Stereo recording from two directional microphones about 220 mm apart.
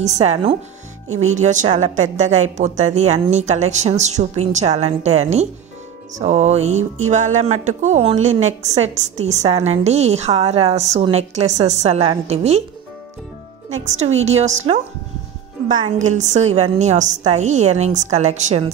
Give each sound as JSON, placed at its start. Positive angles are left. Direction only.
{"t": 0.0, "sound": "a woman's voice", "side_deg": -30}
{"t": 13.7, "sound": "a woman's voice", "side_deg": -30}
{"t": 16.0, "sound": "a woman's voice", "side_deg": -30}